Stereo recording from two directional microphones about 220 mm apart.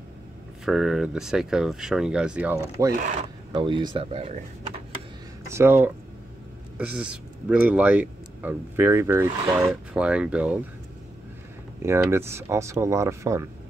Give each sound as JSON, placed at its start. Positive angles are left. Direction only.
{"t": 0.7, "sound": "speech", "side_deg": 0}
{"t": 3.5, "sound": "speech", "side_deg": -20}
{"t": 5.5, "sound": "speech", "side_deg": -10}
{"t": 11.8, "sound": "speech", "side_deg": -10}